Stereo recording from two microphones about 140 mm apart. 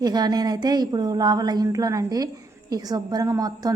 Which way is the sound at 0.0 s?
30° right (ahead or behind).